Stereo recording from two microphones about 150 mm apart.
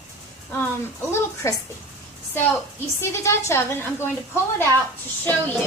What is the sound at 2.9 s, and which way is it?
A woman's voice, 20° left (ahead or behind).